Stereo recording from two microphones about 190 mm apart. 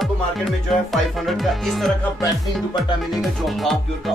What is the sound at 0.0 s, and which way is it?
Music, centre (ahead or behind).